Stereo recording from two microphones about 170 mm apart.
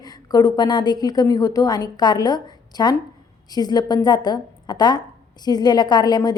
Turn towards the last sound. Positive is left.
turn(degrees=25)  # may be behind; listen again after turning